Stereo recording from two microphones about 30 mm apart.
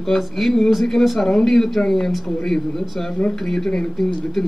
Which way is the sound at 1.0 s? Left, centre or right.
Centre.